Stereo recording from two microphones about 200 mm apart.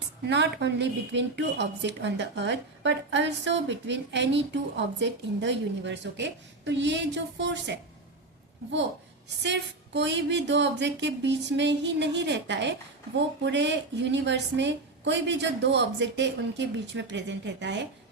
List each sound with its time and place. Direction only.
0.3 s a woman's voice: 60° right (ahead or behind)
9.4 s a woman's voice: 60° right (ahead or behind)